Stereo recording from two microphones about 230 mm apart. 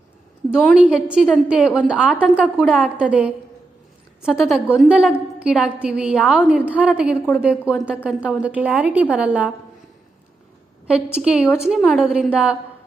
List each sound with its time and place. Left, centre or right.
0.5 s a woman's voice: centre
10.8 s a woman's voice: centre